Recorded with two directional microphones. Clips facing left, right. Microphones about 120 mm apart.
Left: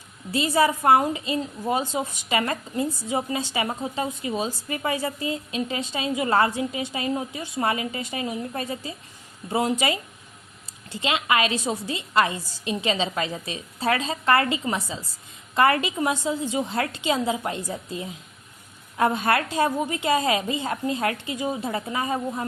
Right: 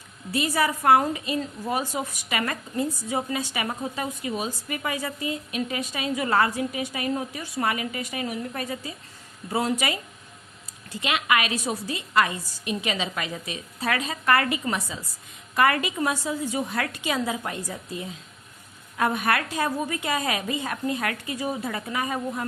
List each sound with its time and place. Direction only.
0.3 s a woman's voice: 25° left (ahead or behind)